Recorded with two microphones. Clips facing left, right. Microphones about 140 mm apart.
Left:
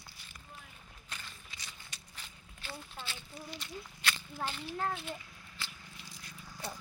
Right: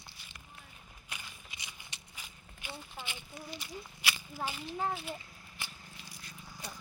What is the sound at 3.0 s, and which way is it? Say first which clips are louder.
Speech: right 1 dB; 15° right (ahead or behind).